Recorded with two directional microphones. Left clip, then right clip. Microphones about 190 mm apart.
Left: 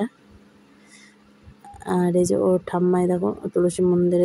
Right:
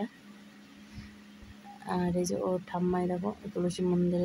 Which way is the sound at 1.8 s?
15° left (ahead or behind).